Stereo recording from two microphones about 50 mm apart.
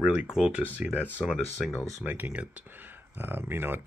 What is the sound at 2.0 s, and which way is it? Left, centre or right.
Speech, right.